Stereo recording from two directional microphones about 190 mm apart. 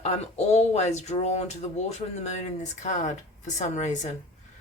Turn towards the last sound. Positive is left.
turn(degrees=40)  # may be behind; listen again after turning